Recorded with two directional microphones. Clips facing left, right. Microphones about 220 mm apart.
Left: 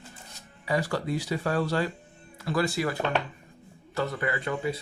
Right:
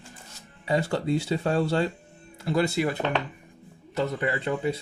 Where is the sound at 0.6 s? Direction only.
25° right (ahead or behind).